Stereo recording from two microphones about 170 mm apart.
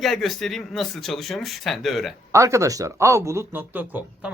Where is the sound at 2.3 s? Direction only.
15° right (ahead or behind).